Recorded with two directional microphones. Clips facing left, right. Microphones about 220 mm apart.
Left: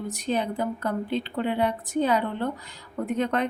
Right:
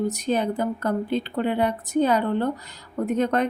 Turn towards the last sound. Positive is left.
turn(degrees=-40)  # may be behind; listen again after turning